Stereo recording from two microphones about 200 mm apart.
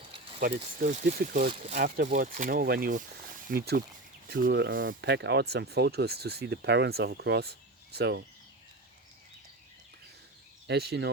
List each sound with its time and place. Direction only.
0.3 s speech: 45° right (ahead or behind)
4.9 s speech: 60° right (ahead or behind)
10.7 s speech: 55° right (ahead or behind)